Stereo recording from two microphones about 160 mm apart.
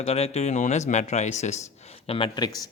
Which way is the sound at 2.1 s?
30° left (ahead or behind).